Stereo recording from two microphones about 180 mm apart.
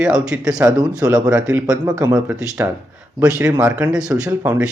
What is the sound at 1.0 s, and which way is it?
Speech, 20° right (ahead or behind).